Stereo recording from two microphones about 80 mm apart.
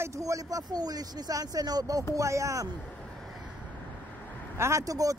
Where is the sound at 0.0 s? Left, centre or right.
Right.